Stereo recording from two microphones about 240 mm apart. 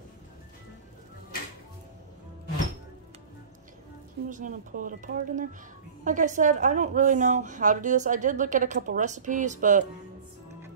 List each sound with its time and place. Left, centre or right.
4.3 s a woman's voice: right